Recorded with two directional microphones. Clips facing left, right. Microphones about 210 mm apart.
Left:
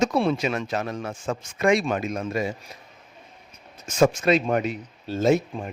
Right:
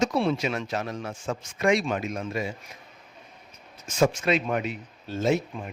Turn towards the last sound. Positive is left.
turn(degrees=30)  # may be behind; listen again after turning